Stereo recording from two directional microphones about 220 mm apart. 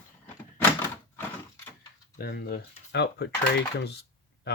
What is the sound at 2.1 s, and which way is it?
Speech, 45° left (ahead or behind).